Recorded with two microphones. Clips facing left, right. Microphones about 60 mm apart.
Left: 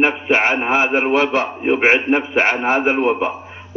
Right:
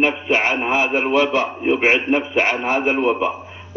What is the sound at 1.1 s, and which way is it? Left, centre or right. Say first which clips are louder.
Speech: left 1 dB; left.